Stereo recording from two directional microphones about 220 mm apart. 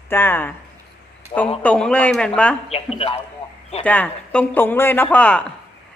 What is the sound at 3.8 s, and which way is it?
Speech, 5° left (ahead or behind).